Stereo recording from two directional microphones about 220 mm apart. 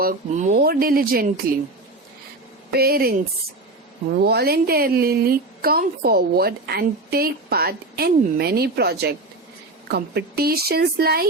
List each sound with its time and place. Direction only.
0.0 s speech: 35° right (ahead or behind)
2.7 s a woman's voice: 45° right (ahead or behind)
4.2 s a woman's voice: 45° right (ahead or behind)